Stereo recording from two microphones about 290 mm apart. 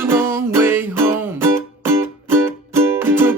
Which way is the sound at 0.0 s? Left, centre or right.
Centre.